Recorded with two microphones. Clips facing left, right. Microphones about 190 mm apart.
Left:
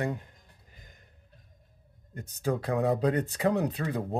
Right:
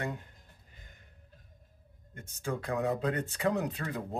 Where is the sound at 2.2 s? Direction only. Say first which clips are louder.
Left 6 dB; 40° left (ahead or behind).